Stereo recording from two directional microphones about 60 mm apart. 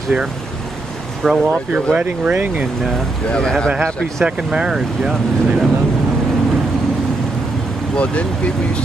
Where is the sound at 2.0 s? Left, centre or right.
Right.